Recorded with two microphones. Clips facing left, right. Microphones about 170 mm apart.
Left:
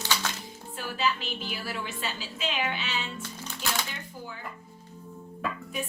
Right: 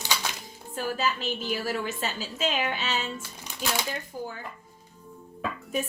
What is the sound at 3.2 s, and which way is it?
Music, 15° right (ahead or behind).